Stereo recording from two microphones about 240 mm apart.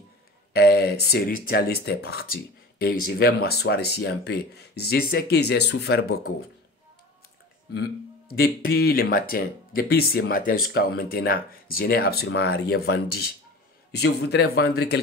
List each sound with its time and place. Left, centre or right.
0.5 s speech: left
8.3 s speech: left